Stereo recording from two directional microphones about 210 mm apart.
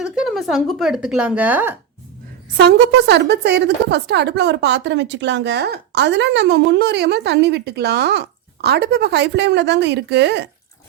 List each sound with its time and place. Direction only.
0.0 s speech: centre (ahead or behind)
2.6 s a woman's voice: 50° right (ahead or behind)